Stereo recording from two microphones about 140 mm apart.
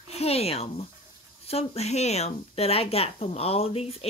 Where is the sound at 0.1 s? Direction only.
45° left (ahead or behind).